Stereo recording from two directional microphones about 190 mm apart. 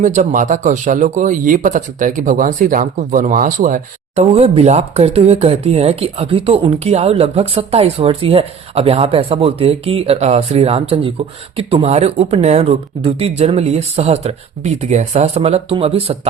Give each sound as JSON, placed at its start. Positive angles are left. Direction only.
{"t": 0.0, "sound": "speech", "side_deg": -40}
{"t": 4.1, "sound": "speech", "side_deg": -35}